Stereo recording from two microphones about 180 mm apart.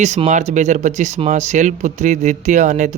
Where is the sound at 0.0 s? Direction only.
40° right (ahead or behind).